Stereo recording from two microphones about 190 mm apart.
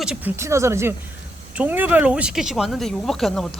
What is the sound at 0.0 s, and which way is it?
Speech, 5° right (ahead or behind).